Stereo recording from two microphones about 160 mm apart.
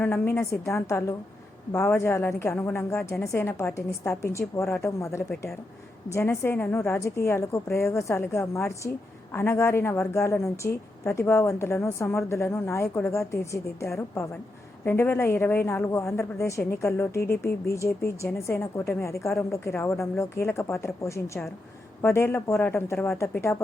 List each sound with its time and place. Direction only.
0.0 s a woman's voice: 15° left (ahead or behind)